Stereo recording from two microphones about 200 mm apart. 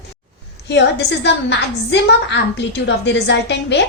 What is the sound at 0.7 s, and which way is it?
A woman's voice, 60° left (ahead or behind).